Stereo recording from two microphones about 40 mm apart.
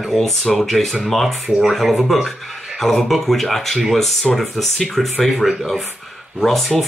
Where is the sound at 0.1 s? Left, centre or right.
Centre.